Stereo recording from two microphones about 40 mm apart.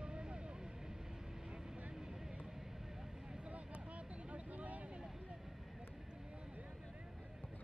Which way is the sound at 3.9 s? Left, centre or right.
Right.